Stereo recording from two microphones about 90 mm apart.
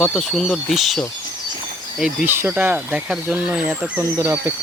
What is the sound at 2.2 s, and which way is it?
Speech, 25° right (ahead or behind).